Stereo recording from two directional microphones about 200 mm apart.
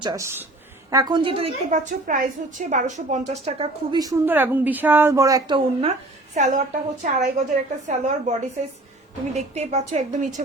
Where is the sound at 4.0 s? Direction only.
15° right (ahead or behind).